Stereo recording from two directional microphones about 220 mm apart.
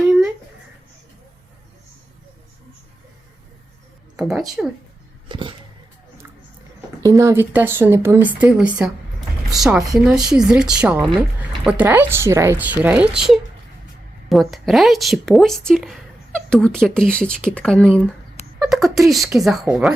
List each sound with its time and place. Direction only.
4.2 s a woman's voice: centre (ahead or behind)
5.3 s a sound: 20° right (ahead or behind)
7.0 s a woman's voice: 15° right (ahead or behind)